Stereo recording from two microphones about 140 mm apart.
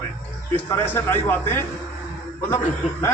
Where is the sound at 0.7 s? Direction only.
15° left (ahead or behind).